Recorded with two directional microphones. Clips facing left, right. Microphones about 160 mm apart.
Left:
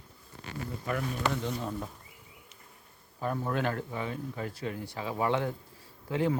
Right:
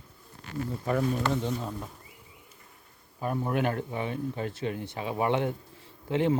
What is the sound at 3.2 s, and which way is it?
Speech, 15° right (ahead or behind).